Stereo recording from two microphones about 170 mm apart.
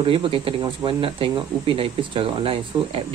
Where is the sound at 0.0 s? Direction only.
30° right (ahead or behind).